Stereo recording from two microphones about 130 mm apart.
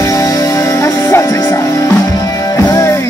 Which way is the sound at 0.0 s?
25° left (ahead or behind).